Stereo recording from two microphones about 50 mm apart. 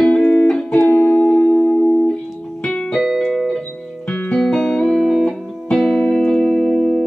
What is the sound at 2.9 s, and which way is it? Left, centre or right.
Keyboard, centre.